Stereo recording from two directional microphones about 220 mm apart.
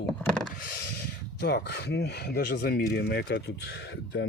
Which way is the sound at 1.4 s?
50° left (ahead or behind).